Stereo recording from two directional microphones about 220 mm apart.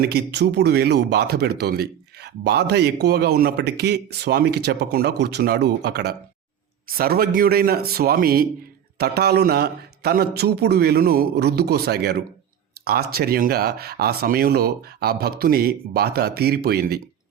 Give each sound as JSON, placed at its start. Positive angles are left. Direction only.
{"t": 0.0, "sound": "speech", "side_deg": -45}